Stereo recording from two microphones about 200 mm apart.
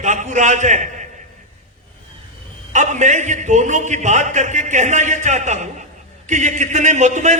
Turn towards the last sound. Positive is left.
turn(degrees=-35)  # may be behind; listen again after turning